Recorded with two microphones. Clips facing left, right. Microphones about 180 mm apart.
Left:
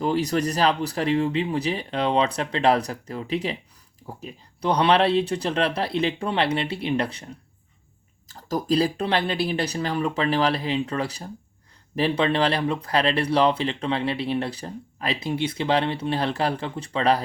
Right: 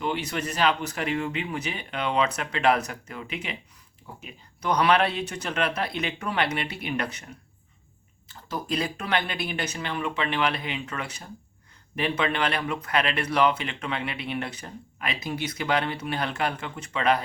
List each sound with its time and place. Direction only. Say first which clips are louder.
0.0 s speech: left 6 dB; 35° left (ahead or behind)